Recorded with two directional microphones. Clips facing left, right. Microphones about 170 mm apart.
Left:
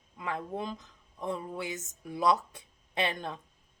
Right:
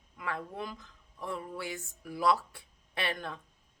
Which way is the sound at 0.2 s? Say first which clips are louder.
Left 3 dB; 20° left (ahead or behind).